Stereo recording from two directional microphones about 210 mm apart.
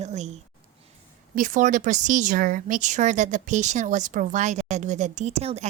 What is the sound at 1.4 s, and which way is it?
Speech, 35° right (ahead or behind).